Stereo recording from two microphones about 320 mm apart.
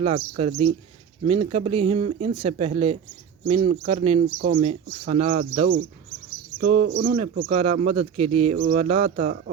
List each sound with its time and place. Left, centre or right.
0.0 s speech: centre
7.0 s speech: right